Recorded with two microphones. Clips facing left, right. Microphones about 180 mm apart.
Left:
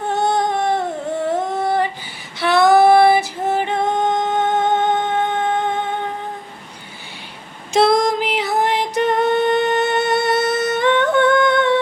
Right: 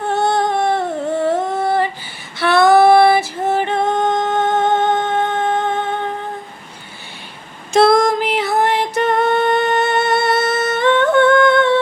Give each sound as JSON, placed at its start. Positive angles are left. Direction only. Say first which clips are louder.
{"t": 0.1, "sound": "a sound", "louder": "right 2 dB", "side_deg": 15}
{"t": 1.3, "sound": "music", "louder": "right 2 dB", "side_deg": 15}
{"t": 2.4, "sound": "female singing", "louder": "right 1 dB", "side_deg": 15}
{"t": 7.7, "sound": "female singing", "louder": "right 3 dB", "side_deg": 15}